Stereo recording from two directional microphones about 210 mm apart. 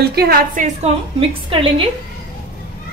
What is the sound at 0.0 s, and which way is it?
Speech, 50° right (ahead or behind).